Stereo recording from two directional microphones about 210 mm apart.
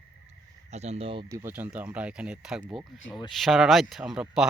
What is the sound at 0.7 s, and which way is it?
Speech, 30° right (ahead or behind).